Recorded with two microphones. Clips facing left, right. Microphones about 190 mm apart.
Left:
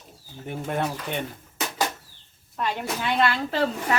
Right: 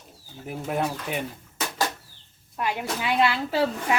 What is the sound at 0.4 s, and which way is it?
Speech, centre (ahead or behind).